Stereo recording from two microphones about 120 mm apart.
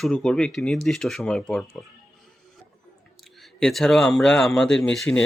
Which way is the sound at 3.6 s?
5° left (ahead or behind).